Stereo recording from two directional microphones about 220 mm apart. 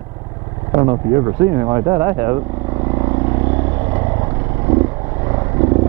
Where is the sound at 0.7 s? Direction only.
20° right (ahead or behind).